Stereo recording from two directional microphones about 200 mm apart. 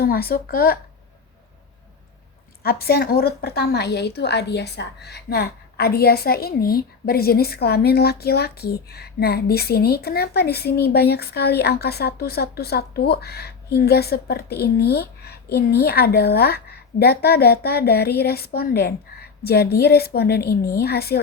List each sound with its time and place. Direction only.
0.0 s a woman's voice: 50° left (ahead or behind)
2.6 s a woman's voice: 50° left (ahead or behind)